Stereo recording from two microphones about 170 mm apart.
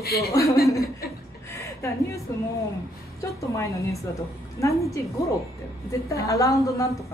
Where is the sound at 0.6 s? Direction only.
20° left (ahead or behind).